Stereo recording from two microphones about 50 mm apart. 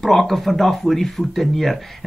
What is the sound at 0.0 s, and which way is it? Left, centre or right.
Speech, centre.